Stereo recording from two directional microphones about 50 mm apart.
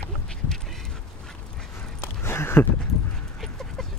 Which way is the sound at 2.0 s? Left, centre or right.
Left.